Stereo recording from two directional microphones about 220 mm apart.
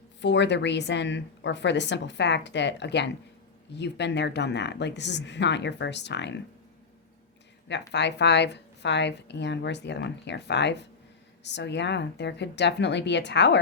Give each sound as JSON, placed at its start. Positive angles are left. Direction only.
{"t": 0.2, "sound": "a woman's voice", "side_deg": 55}
{"t": 7.9, "sound": "a woman's voice", "side_deg": 50}